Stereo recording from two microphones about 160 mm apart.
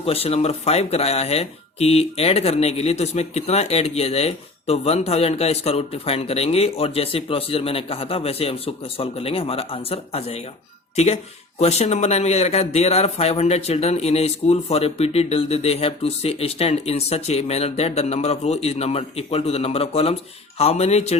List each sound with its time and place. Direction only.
0.0 s speech: 40° left (ahead or behind)